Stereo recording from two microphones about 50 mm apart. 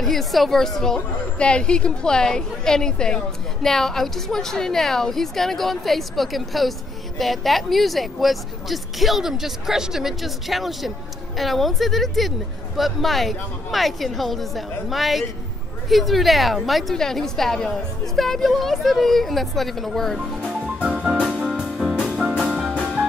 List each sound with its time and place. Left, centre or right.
0.0 s a woman's voice: centre
16.9 s speech: centre
20.2 s music: right